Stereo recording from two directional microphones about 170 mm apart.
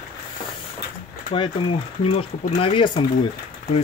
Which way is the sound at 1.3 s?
30° left (ahead or behind).